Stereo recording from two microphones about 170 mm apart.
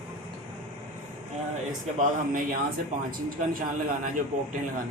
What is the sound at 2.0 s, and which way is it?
Speech, 55° right (ahead or behind).